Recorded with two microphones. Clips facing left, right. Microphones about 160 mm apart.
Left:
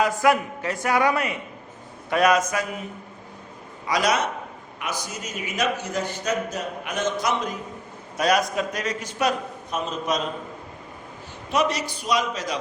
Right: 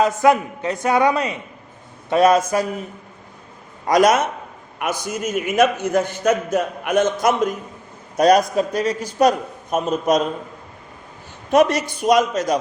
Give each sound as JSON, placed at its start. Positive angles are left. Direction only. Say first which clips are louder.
{"t": 0.0, "sound": "a man's voice", "louder": "right 4 dB", "side_deg": -20}
{"t": 3.8, "sound": "a man's voice", "louder": "right 8 dB", "side_deg": -50}
{"t": 8.1, "sound": "a man's voice", "louder": "right 7 dB", "side_deg": -40}
{"t": 11.5, "sound": "a man's voice", "louder": "right 8 dB", "side_deg": -50}